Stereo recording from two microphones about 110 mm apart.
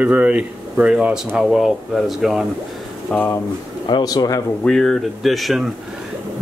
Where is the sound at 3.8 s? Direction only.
40° left (ahead or behind).